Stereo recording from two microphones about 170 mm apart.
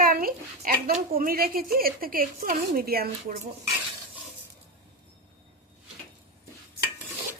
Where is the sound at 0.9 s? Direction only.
50° right (ahead or behind).